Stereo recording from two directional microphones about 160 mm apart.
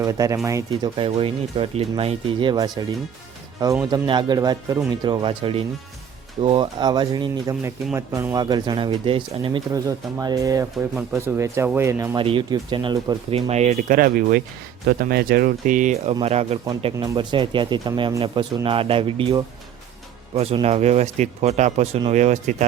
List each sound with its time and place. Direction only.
0.0 s speech: 20° right (ahead or behind)
0.9 s speech: 35° right (ahead or behind)
9.7 s speech: 20° right (ahead or behind)
12.1 s speech: 30° right (ahead or behind)
13.3 s speech: 45° right (ahead or behind)
17.0 s speech: 30° right (ahead or behind)
20.3 s speech: 40° right (ahead or behind)